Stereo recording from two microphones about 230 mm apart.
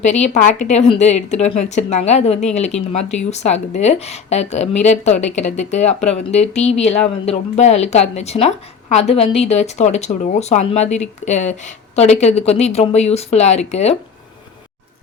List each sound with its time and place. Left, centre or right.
0.0 s speech: left